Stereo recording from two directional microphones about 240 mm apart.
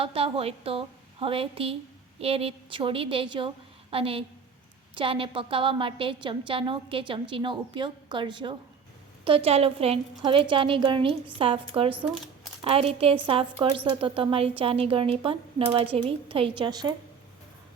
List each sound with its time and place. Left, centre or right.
0.0 s a woman's voice: right